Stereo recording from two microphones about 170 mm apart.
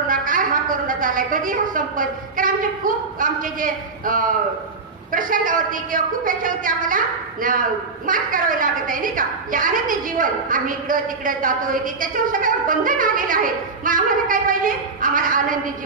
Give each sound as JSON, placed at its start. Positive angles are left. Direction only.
{"t": 0.1, "sound": "a woman's voice", "side_deg": -55}